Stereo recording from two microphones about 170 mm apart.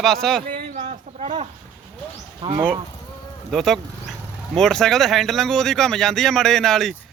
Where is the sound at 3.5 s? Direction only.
Centre (ahead or behind).